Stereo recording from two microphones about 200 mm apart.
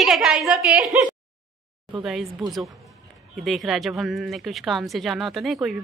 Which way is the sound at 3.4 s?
Centre (ahead or behind).